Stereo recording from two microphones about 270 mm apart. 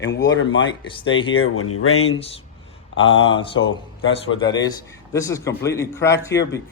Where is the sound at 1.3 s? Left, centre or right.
Left.